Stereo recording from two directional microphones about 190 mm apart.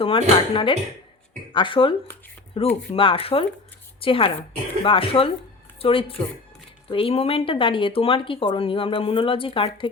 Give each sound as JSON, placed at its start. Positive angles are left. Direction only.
{"t": 0.0, "sound": "speech", "side_deg": 30}